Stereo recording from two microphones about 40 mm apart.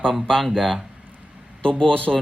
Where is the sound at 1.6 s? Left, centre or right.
Left.